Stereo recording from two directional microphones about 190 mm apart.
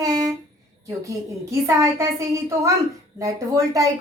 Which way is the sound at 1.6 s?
15° right (ahead or behind).